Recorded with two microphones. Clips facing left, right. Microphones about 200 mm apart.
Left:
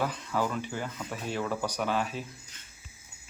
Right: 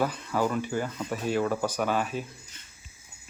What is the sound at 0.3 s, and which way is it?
Speech, 45° right (ahead or behind).